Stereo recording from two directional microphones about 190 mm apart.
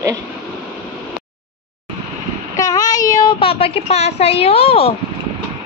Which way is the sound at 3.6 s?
30° left (ahead or behind).